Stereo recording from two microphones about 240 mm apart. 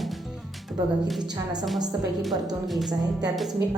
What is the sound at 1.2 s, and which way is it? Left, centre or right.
Speech, centre.